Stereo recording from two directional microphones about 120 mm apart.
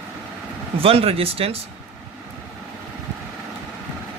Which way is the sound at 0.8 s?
55° right (ahead or behind).